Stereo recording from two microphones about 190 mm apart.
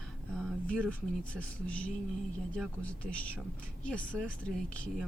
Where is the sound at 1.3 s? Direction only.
5° left (ahead or behind).